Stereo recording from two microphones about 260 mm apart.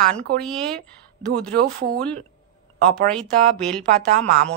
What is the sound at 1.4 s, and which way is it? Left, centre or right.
Speech, right.